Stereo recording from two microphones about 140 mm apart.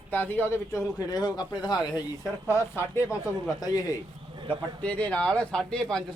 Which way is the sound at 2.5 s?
20° left (ahead or behind).